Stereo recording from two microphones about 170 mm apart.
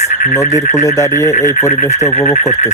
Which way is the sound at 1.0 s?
15° left (ahead or behind).